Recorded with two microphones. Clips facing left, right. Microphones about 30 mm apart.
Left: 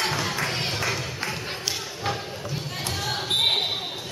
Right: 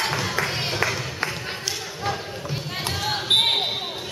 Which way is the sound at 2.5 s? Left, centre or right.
Centre.